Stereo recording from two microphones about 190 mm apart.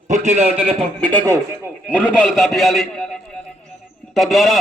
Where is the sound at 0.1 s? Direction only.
35° right (ahead or behind).